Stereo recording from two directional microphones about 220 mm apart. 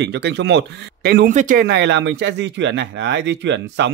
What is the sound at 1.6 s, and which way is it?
Speech, 50° right (ahead or behind).